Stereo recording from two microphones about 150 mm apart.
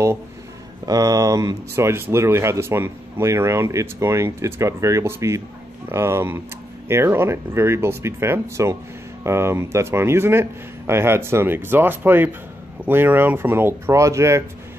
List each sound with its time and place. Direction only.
0.8 s speech: 25° right (ahead or behind)